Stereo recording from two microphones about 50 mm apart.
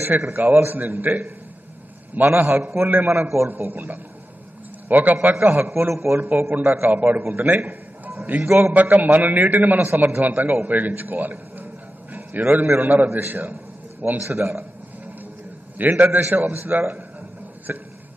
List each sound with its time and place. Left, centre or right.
0.0 s a man's voice: right
3.1 s a man's voice: right
3.4 s a man's voice: right
5.9 s a man's voice: right
6.6 s a man's voice: right
7.4 s a sound: right
8.3 s a man's voice: right
15.8 s a man's voice: right